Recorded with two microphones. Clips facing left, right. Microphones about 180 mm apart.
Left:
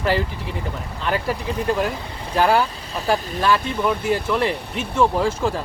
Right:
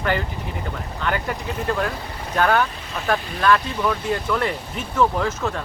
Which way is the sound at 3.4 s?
25° left (ahead or behind).